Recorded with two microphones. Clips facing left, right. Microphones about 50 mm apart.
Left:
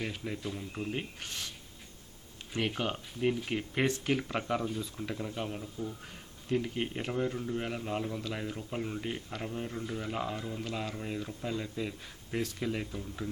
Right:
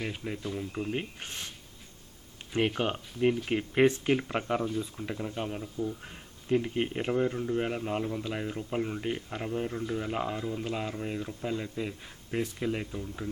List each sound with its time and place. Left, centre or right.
0.0 s speech: centre
1.2 s speech: right; by 6.0 s centre
6.0 s speech: centre